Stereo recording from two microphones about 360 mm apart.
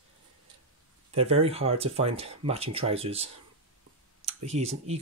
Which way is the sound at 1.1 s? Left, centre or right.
Centre.